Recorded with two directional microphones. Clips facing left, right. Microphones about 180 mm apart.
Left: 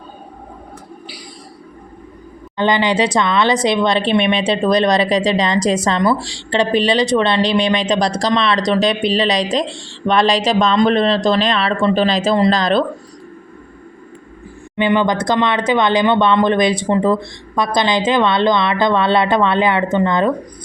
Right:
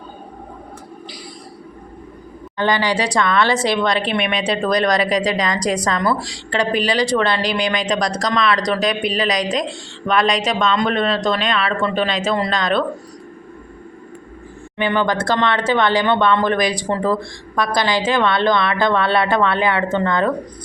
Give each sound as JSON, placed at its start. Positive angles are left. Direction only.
{"t": 2.6, "sound": "a woman's voice", "side_deg": 20}
{"t": 14.8, "sound": "a woman's voice", "side_deg": 20}